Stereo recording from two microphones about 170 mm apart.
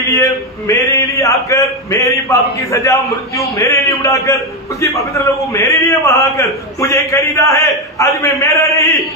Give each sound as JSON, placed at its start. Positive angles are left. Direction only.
{"t": 0.0, "sound": "a man's voice", "side_deg": 15}